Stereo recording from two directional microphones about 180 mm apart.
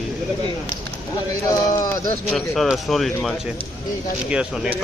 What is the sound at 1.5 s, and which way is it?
Speech, 20° left (ahead or behind).